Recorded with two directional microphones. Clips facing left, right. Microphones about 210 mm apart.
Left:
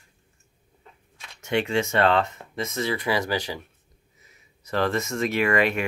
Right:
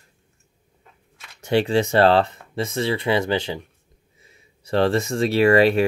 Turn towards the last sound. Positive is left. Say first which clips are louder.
# right 7 dB
turn(degrees=-30)  # may be behind; listen again after turning